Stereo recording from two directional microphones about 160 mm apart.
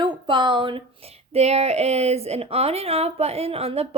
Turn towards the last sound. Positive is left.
turn(degrees=-40)  # may be behind; listen again after turning